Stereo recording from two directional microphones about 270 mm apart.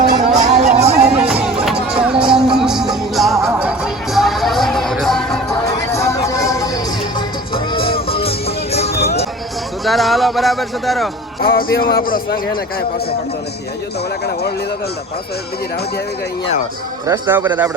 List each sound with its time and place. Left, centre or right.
0.0 s a sound: right
1.3 s music: centre; by 8.9 s left
9.8 s speech: centre
11.3 s speech: left
17.1 s a man's voice: centre